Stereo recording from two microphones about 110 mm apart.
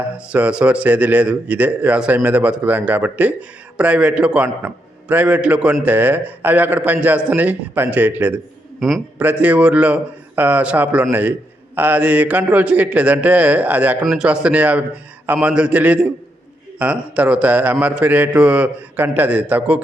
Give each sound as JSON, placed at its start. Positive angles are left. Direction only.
{"t": 0.3, "sound": "a man's voice", "side_deg": -10}
{"t": 8.8, "sound": "a man's voice", "side_deg": 0}
{"t": 9.1, "sound": "a man's voice", "side_deg": -15}
{"t": 14.0, "sound": "a man's voice", "side_deg": -5}